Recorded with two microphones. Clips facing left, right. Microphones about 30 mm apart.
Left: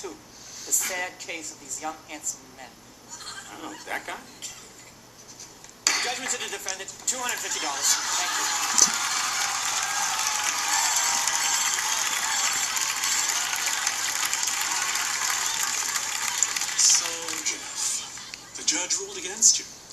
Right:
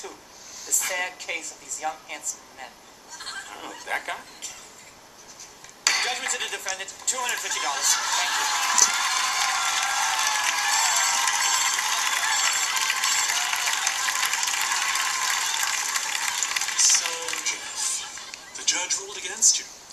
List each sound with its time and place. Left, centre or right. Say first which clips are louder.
0.8 s a woman's voice: right 3 dB; right
3.2 s goat: right 3 dB; right
3.8 s speech: right 4 dB; centre
5.9 s a sound: right 2 dB; right
6.3 s speech: right 3 dB; right
8.9 s a sound: right 3 dB; right
10.2 s applause: right 3 dB; right
10.7 s a sound: right 1 dB; right
16.9 s music: right 1 dB; right
18.9 s speech: even; right